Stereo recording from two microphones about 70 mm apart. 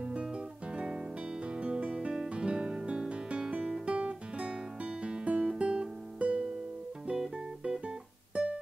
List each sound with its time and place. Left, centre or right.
0.0 s guitar: centre
1.6 s music: centre